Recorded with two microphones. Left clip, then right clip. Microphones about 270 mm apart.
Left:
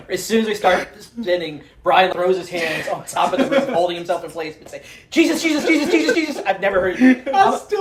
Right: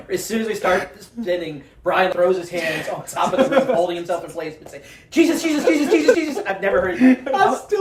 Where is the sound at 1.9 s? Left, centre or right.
Centre.